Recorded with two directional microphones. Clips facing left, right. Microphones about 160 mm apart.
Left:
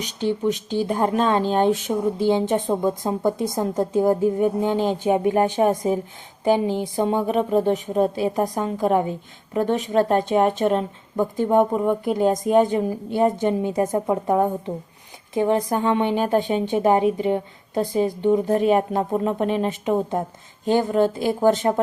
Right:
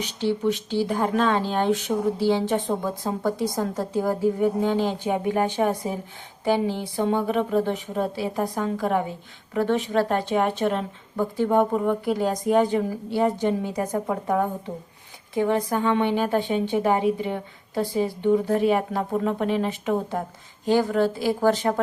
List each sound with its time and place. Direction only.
0.0 s a woman's voice: 15° left (ahead or behind)
6.4 s a woman's voice: 15° left (ahead or behind)
15.7 s a woman's voice: 20° left (ahead or behind)